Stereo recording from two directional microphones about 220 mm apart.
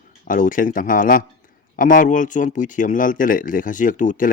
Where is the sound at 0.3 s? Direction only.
35° left (ahead or behind).